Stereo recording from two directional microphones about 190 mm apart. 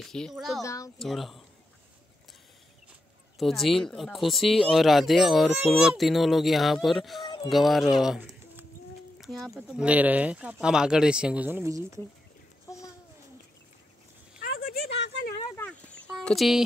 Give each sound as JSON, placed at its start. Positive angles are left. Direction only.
{"t": 0.0, "sound": "speech", "side_deg": 0}
{"t": 0.6, "sound": "a child's voice", "side_deg": 15}
{"t": 0.9, "sound": "speech", "side_deg": 0}
{"t": 3.3, "sound": "speech", "side_deg": 0}
{"t": 14.4, "sound": "a sound", "side_deg": 50}
{"t": 16.3, "sound": "speech", "side_deg": 0}